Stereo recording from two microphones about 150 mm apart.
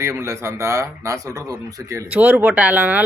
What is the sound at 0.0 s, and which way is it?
Speech, 20° right (ahead or behind).